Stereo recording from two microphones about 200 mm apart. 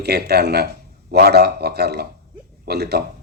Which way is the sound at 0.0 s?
55° right (ahead or behind).